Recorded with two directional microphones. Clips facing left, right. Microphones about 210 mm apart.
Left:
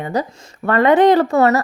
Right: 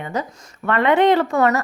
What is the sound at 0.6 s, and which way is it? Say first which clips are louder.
Speech: left 4 dB; 40° left (ahead or behind).